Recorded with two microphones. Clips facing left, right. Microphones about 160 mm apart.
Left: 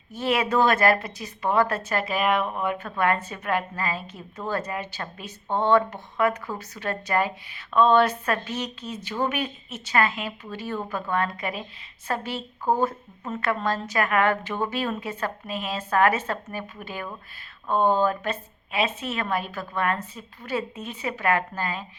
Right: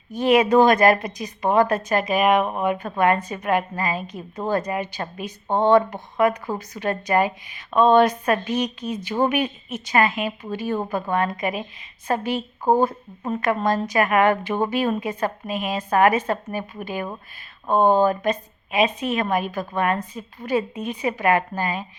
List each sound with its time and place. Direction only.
0.1 s a woman's voice: 15° right (ahead or behind)